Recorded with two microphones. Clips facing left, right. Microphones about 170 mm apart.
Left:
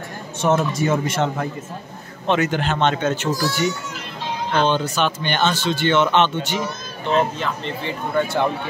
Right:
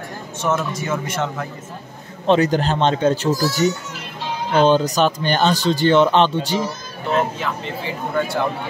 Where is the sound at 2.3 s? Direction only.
35° right (ahead or behind).